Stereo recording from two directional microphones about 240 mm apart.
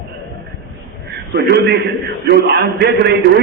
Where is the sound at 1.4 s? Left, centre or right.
Right.